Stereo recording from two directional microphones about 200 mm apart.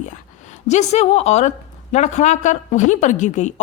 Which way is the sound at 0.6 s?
35° left (ahead or behind).